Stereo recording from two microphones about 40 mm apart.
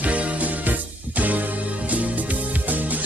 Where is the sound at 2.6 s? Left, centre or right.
Right.